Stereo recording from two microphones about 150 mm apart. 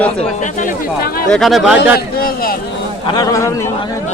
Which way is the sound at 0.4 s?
70° left (ahead or behind).